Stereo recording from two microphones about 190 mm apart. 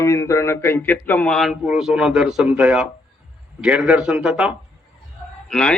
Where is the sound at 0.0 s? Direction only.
15° left (ahead or behind).